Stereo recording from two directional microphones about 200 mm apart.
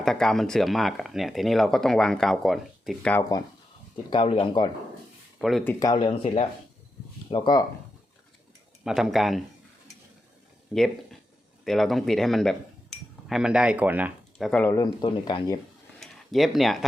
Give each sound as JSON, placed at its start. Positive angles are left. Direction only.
{"t": 0.0, "sound": "speech", "side_deg": 0}
{"t": 4.1, "sound": "speech", "side_deg": 25}
{"t": 5.4, "sound": "speech", "side_deg": 0}
{"t": 5.8, "sound": "speech", "side_deg": 20}
{"t": 8.8, "sound": "speech", "side_deg": 0}
{"t": 10.8, "sound": "speech", "side_deg": 0}
{"t": 16.0, "sound": "a sound", "side_deg": 0}